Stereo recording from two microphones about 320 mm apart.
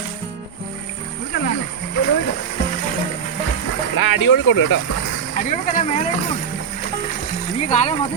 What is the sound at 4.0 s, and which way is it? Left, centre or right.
Speech, left.